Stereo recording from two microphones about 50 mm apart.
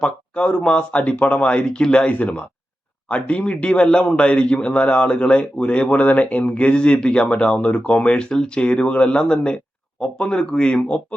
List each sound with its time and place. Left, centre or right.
0.0 s a man's voice: left
2.1 s a man's voice: left